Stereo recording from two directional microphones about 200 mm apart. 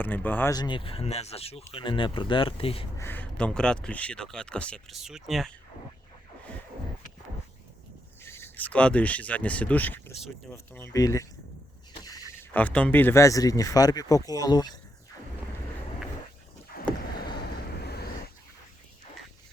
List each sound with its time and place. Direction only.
0.0 s speech: 10° left (ahead or behind); by 2.8 s 30° left (ahead or behind)
3.0 s speech: 10° left (ahead or behind)
8.2 s speech: 10° left (ahead or behind)
11.9 s a sound: 20° left (ahead or behind)
12.5 s speech: 5° left (ahead or behind)